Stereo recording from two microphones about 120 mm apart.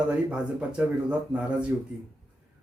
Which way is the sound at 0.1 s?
10° right (ahead or behind).